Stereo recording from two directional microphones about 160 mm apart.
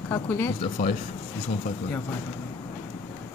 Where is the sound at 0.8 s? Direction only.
55° left (ahead or behind).